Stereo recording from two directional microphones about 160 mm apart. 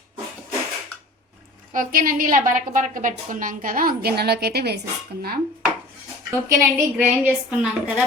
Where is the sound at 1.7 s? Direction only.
60° right (ahead or behind); by 4.8 s 85° right.